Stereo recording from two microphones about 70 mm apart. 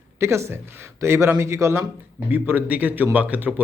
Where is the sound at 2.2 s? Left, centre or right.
Right.